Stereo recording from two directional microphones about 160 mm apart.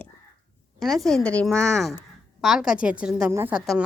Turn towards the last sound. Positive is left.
turn(degrees=-10)  # may be behind; listen again after turning